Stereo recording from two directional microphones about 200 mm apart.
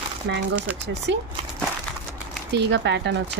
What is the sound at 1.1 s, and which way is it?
Speech, 60° right (ahead or behind).